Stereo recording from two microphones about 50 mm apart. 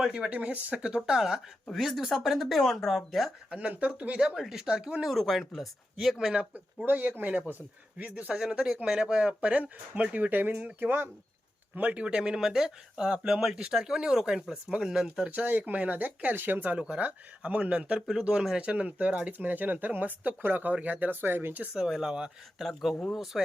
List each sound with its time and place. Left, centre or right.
0.0 s speech: centre
0.3 s speech: right; by 1.4 s centre
1.7 s speech: centre
3.7 s speech: right
4.4 s speech: centre
5.0 s speech: centre
6.8 s speech: right
8.3 s speech: centre; by 11.1 s right
11.7 s speech: right; by 15.3 s centre
15.4 s speech: right
16.7 s speech: right
21.7 s speech: centre